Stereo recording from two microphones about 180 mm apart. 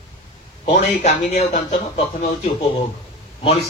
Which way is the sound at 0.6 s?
40° left (ahead or behind).